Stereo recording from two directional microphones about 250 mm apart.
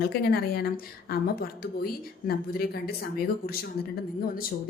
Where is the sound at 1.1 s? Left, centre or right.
Left.